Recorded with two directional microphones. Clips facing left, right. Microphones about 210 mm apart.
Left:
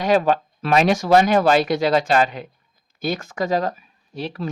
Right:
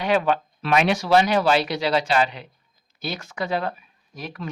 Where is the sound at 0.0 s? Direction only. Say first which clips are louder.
Left 3 dB; 40° left (ahead or behind).